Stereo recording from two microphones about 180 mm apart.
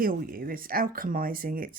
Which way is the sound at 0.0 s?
55° right (ahead or behind).